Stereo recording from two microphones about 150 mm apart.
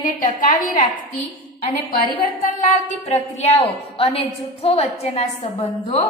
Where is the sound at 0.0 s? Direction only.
65° left (ahead or behind).